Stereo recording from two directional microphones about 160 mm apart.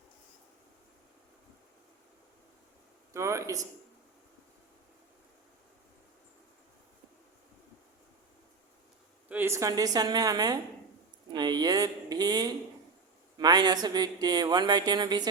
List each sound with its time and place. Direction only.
3.1 s a man's voice: 20° right (ahead or behind)
9.3 s speech: 15° right (ahead or behind)